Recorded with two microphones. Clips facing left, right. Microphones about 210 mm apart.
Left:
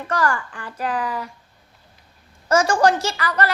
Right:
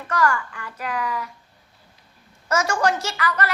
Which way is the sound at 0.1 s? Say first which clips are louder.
Right 1 dB; 30° left (ahead or behind).